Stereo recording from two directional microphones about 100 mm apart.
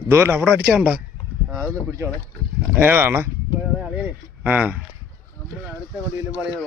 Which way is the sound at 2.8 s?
20° right (ahead or behind).